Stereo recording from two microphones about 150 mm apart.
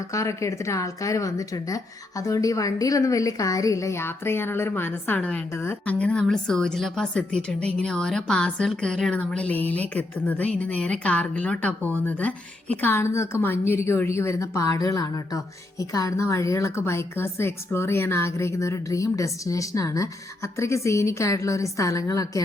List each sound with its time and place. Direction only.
0.1 s a woman's voice: 20° left (ahead or behind)